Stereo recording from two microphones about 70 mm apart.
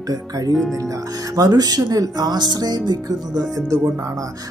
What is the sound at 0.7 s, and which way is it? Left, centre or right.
Speech, right.